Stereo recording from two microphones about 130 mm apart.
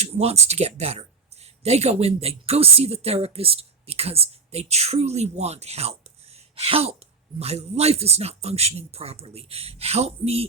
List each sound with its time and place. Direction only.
0.0 s a man's voice: 55° right (ahead or behind)